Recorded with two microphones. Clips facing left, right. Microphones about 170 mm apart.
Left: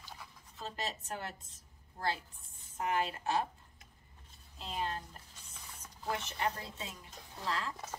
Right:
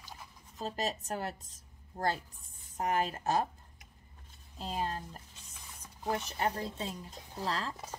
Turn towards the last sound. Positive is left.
turn(degrees=-35)  # may be behind; listen again after turning